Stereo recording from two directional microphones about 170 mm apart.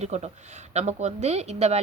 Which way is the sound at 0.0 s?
40° right (ahead or behind).